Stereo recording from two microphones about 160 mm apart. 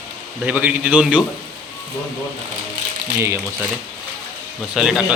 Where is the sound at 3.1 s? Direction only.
15° right (ahead or behind).